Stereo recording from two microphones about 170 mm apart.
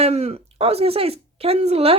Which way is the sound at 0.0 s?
40° right (ahead or behind).